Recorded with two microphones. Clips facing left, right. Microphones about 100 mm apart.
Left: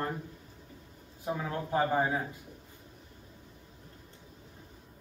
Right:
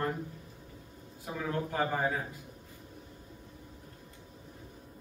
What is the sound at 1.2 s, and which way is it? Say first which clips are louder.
Speech: even; 25° left (ahead or behind).